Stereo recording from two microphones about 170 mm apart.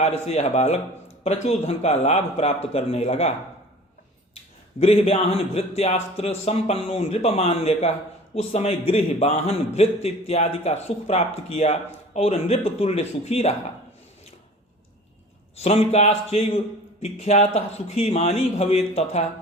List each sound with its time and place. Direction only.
0.3 s a man's voice: 40° left (ahead or behind)
4.8 s a man's voice: 35° left (ahead or behind)
15.5 s a man's voice: 40° left (ahead or behind)